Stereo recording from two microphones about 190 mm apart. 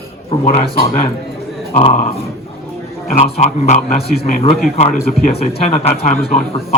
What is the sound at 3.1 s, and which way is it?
Speech, 35° left (ahead or behind).